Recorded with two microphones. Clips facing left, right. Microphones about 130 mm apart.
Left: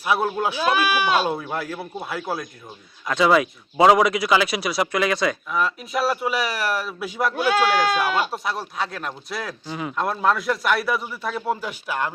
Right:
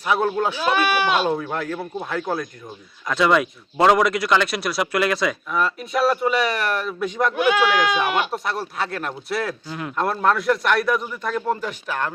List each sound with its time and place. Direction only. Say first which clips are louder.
0.0 s speech: right 1 dB; 10° left (ahead or behind)
7.3 s speech: right 1 dB; 35° left (ahead or behind)
7.9 s speech: right 1 dB; 5° left (ahead or behind)